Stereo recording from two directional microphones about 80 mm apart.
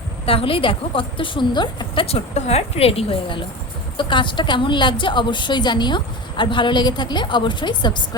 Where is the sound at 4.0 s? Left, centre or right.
Left.